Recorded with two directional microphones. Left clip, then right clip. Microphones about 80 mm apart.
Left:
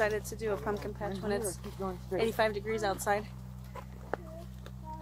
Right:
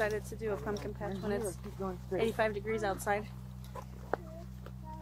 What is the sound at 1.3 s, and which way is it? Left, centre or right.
Speech, centre.